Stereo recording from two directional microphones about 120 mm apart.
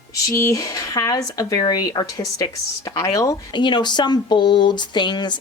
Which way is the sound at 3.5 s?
40° left (ahead or behind).